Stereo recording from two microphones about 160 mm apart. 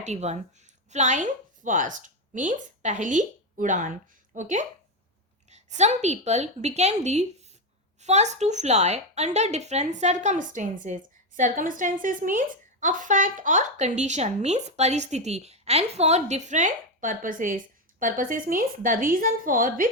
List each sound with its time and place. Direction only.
0.0 s a woman's voice: 45° right (ahead or behind)